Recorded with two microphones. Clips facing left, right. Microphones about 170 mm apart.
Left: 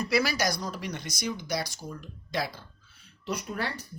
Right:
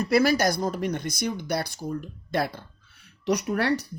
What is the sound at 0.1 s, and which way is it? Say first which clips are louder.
Speech: right 7 dB; 50° right (ahead or behind).